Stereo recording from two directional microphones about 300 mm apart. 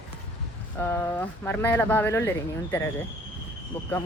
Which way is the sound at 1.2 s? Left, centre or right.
Centre.